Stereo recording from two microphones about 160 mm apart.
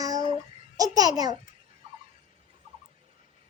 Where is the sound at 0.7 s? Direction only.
25° right (ahead or behind).